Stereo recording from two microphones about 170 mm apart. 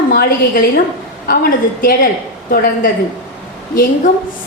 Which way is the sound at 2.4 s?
55° left (ahead or behind).